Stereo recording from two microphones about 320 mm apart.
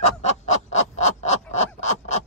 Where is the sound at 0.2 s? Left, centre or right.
Left.